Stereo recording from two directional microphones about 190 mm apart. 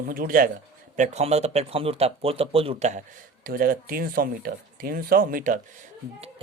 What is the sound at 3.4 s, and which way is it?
Speech, 50° right (ahead or behind).